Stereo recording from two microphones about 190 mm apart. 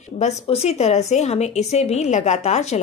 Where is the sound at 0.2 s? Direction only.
35° left (ahead or behind).